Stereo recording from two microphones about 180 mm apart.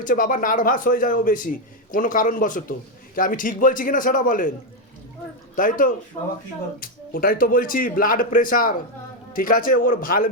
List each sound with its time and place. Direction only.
0.0 s a man's voice: 45° left (ahead or behind)
5.5 s a man's voice: 50° left (ahead or behind)
6.2 s speech: 40° left (ahead or behind)
6.7 s a man's voice: 55° left (ahead or behind)